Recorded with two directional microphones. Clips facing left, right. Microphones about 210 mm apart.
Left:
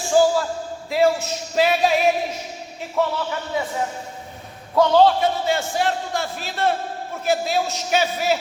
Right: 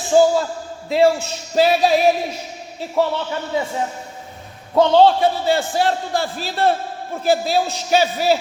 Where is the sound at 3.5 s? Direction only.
25° right (ahead or behind).